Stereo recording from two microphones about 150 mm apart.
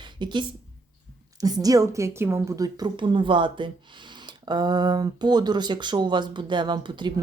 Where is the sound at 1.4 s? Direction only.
25° right (ahead or behind).